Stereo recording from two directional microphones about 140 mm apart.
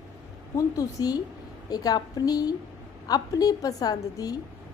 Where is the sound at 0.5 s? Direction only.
25° left (ahead or behind).